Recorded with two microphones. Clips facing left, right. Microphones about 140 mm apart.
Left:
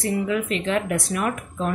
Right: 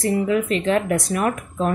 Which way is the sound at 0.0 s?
40° right (ahead or behind).